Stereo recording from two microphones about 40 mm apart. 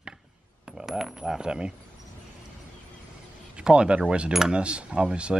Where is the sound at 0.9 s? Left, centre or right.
Centre.